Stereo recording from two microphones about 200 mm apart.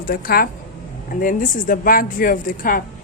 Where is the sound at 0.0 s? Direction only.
45° left (ahead or behind).